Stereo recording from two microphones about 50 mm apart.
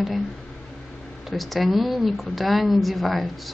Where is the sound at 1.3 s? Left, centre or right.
Centre.